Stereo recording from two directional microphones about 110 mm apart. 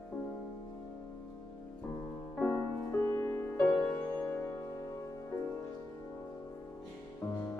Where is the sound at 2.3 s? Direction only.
25° left (ahead or behind).